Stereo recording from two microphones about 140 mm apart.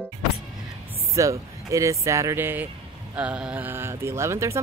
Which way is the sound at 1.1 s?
20° right (ahead or behind).